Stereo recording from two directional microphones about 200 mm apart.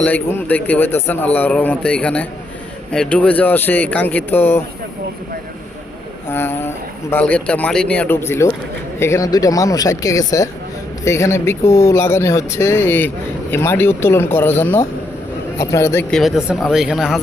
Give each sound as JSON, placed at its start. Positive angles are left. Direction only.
{"t": 0.0, "sound": "speech", "side_deg": 10}
{"t": 6.2, "sound": "speech", "side_deg": 10}